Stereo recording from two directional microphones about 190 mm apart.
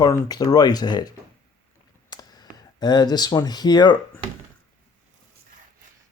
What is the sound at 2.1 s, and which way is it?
Speech, 20° left (ahead or behind).